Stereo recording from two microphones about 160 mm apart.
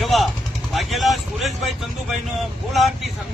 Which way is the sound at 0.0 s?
Centre (ahead or behind).